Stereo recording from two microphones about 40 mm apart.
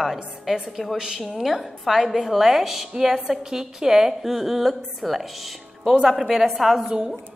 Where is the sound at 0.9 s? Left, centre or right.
Centre.